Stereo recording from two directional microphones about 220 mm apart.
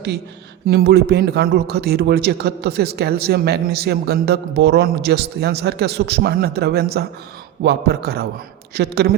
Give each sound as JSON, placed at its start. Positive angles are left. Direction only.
{"t": 0.7, "sound": "a man's voice", "side_deg": -45}